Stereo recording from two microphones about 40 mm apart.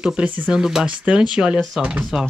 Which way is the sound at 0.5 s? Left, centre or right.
Centre.